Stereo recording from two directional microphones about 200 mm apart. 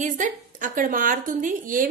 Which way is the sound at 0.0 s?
40° right (ahead or behind).